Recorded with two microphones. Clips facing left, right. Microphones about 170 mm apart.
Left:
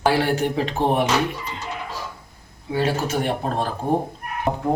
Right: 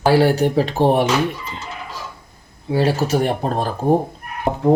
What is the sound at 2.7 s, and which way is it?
Speech, 35° right (ahead or behind).